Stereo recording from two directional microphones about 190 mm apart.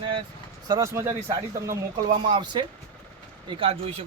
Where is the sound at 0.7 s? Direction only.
15° right (ahead or behind).